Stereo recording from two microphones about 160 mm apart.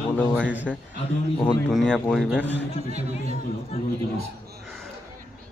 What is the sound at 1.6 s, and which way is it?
Speech, 5° left (ahead or behind).